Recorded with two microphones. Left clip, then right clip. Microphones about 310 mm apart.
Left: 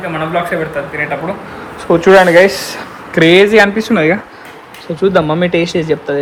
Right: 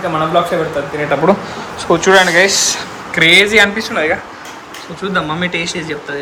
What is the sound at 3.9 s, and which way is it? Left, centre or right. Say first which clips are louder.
Speech: left 3 dB; centre.